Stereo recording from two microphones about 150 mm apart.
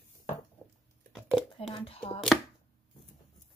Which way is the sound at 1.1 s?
Centre (ahead or behind).